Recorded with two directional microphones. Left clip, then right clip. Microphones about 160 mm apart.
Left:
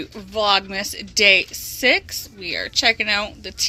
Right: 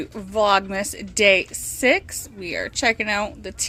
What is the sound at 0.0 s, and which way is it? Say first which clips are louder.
Speech: right 1 dB; 20° right (ahead or behind).